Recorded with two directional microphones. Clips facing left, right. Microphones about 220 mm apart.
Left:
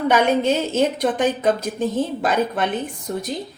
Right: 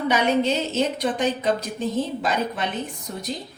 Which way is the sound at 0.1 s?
50° left (ahead or behind).